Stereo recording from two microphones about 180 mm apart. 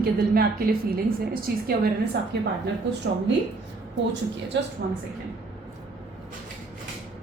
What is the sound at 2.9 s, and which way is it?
Speech, 80° right.